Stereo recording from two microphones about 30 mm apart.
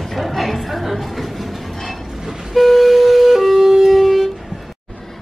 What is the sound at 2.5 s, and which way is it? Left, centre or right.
Music, centre.